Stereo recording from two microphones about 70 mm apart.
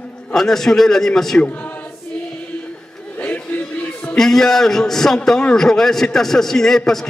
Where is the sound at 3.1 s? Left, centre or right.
Left.